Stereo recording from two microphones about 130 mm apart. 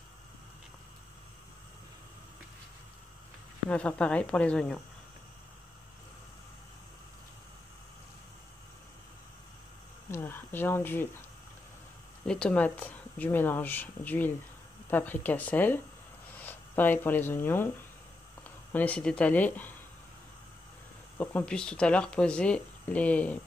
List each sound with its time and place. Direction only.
3.7 s speech: 10° left (ahead or behind)
10.1 s a sound: 15° left (ahead or behind)
12.3 s speech: 5° left (ahead or behind)
18.7 s speech: 10° left (ahead or behind)
21.2 s speech: 10° left (ahead or behind)